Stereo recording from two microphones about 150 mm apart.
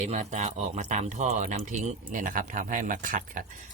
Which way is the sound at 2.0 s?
65° right (ahead or behind).